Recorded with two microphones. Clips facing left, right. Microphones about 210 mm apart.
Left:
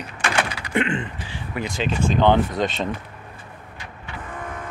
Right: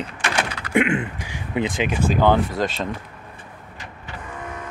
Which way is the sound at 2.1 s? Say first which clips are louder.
Left 1 dB; 5° right (ahead or behind).